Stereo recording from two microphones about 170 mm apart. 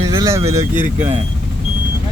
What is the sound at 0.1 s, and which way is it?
Speech, 20° right (ahead or behind).